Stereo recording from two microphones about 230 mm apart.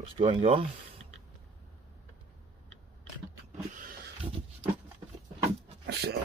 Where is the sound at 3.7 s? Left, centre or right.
Right.